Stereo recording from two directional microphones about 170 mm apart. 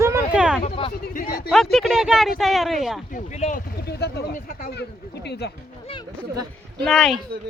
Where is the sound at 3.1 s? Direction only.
45° left (ahead or behind).